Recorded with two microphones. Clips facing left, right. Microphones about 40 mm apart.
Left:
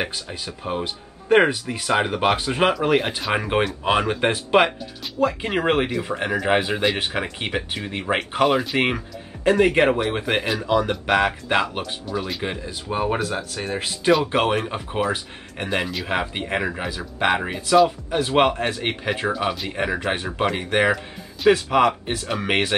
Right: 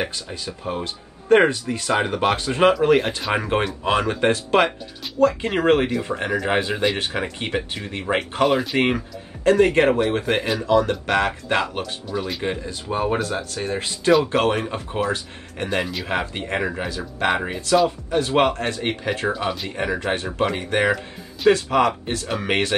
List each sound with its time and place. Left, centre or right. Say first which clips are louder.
0.0 s speech: even; centre
3.4 s speech: left 1 dB; centre
12.1 s speech: right 2 dB; centre
21.5 s speech: left 1 dB; centre